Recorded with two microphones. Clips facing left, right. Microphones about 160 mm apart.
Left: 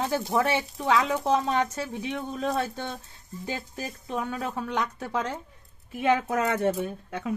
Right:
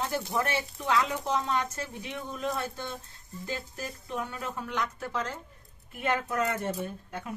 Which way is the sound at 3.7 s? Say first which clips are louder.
Left 4 dB; 90° left.